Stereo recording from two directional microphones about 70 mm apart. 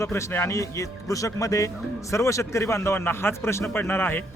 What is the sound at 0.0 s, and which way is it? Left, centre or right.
Speech, left.